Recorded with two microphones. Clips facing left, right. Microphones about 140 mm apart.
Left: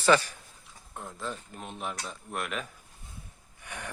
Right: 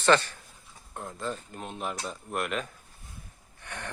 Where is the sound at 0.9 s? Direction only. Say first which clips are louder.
Right 3 dB; centre (ahead or behind).